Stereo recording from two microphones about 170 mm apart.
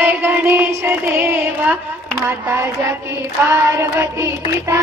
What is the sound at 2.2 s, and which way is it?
Child singing, 15° right (ahead or behind).